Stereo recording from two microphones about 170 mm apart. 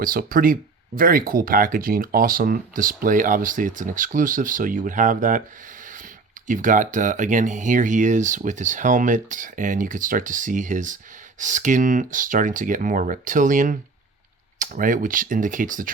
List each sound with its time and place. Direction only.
0.0 s speech: 55° right (ahead or behind)
5.8 s a sound: 50° right (ahead or behind)
6.5 s speech: 50° right (ahead or behind)